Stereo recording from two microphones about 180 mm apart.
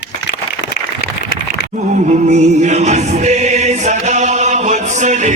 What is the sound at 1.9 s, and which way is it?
Music, 40° right (ahead or behind).